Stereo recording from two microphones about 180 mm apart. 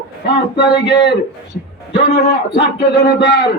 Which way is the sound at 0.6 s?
70° left (ahead or behind).